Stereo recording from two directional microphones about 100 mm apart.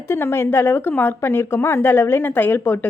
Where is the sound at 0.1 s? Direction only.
25° left (ahead or behind).